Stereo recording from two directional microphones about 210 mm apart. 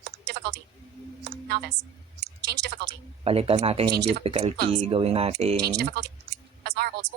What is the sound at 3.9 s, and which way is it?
Speech, 50° right (ahead or behind).